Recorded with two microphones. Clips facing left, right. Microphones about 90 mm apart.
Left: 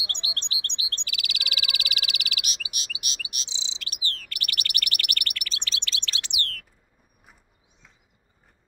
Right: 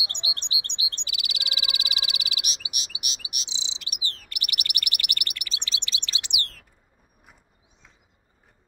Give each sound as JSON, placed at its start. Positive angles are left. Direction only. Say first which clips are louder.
{"t": 0.0, "sound": "bird", "louder": "even", "side_deg": -15}